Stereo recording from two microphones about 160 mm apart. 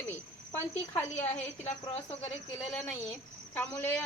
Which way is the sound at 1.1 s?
45° left (ahead or behind).